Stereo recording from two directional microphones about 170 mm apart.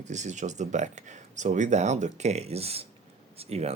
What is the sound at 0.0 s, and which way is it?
Speech, 45° right (ahead or behind).